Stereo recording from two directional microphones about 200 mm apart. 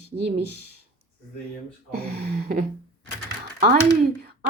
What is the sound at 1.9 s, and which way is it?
Speech, 50° right (ahead or behind).